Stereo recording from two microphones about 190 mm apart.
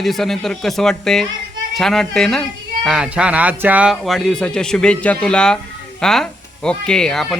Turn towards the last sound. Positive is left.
turn(degrees=5)  # may be behind; listen again after turning